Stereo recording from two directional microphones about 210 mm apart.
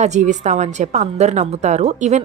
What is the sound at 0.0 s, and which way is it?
A woman's voice, 35° right (ahead or behind).